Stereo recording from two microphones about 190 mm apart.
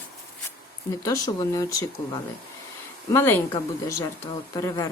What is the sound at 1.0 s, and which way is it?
A woman's voice, 20° left (ahead or behind).